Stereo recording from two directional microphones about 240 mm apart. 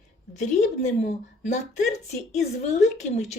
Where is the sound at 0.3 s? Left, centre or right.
Left.